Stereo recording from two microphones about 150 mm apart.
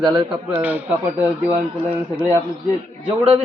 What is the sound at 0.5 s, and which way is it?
Speech, 10° right (ahead or behind).